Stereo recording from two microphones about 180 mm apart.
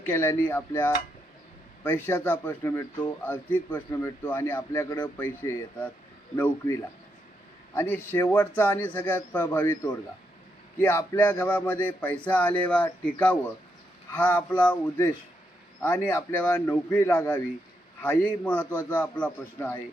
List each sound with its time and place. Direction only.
0.0 s speech: 15° left (ahead or behind)
6.3 s speech: 10° left (ahead or behind)
7.8 s a man's voice: 15° left (ahead or behind)
18.0 s speech: 5° left (ahead or behind)